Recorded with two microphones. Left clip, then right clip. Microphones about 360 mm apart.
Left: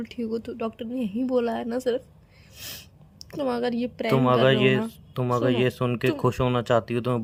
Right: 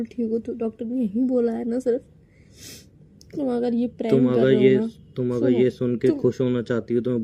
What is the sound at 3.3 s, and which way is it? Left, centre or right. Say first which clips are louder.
Speech: right 2 dB; left.